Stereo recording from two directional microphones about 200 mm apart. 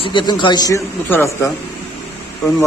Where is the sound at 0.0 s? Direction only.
25° left (ahead or behind).